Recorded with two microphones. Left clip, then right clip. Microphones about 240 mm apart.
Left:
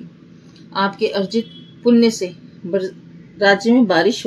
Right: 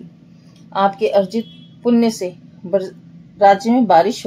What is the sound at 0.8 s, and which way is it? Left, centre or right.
A woman's voice, right.